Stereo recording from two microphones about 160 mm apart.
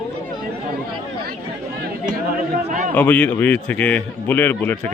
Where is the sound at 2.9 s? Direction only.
10° left (ahead or behind).